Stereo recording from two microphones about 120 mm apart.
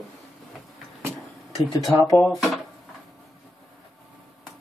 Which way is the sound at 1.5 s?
Centre (ahead or behind).